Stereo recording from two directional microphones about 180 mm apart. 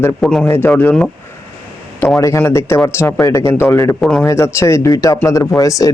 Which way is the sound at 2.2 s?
15° left (ahead or behind).